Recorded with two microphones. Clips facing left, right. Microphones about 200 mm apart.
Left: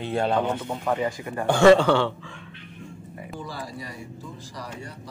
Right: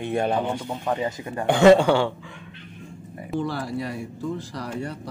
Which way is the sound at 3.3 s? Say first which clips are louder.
Right 10 dB; 65° right (ahead or behind).